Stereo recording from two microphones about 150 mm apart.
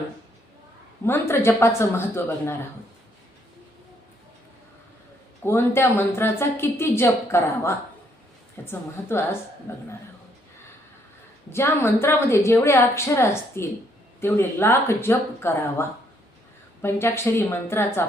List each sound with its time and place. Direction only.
1.0 s a woman's voice: 15° left (ahead or behind)
5.4 s a woman's voice: 15° left (ahead or behind)
11.5 s a woman's voice: 15° left (ahead or behind)